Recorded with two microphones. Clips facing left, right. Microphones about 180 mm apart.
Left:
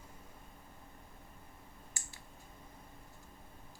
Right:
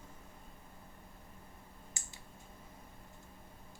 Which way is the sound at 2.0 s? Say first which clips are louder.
Even; 20° right (ahead or behind).